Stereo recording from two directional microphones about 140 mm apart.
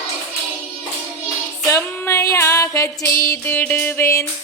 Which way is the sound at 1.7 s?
20° left (ahead or behind).